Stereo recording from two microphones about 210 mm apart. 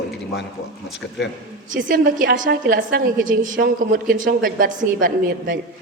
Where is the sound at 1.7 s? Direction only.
40° right (ahead or behind).